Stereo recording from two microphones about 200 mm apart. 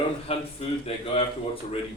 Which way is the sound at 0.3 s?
30° left (ahead or behind).